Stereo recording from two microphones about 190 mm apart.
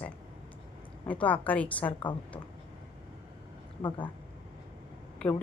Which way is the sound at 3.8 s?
25° left (ahead or behind).